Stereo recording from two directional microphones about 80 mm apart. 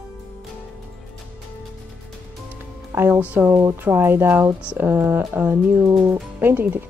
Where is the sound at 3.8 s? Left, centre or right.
Right.